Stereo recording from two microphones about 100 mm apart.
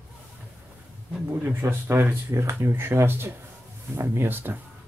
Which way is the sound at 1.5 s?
20° right (ahead or behind).